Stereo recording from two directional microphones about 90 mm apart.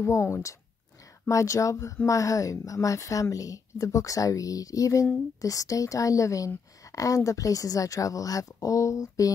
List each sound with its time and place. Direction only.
0.0 s a woman's voice: 30° left (ahead or behind)